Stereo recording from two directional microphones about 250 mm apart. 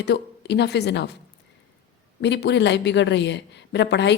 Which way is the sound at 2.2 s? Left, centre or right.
Left.